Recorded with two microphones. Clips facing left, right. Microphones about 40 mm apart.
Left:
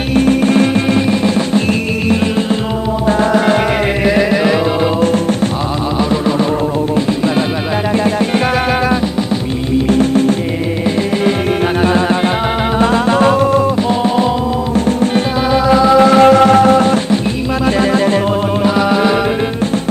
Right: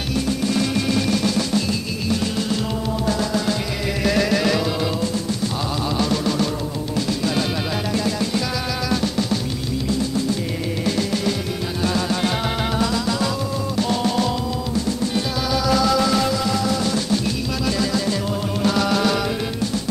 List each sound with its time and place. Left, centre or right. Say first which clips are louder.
0.1 s music: left 11 dB; left
4.0 s music: left 4 dB; left
9.8 s music: left 10 dB; left
11.8 s music: left 5 dB; left
13.8 s music: left 7 dB; left
14.9 s music: left 9 dB; left
15.6 s music: left 10 dB; left
18.6 s music: left 5 dB; left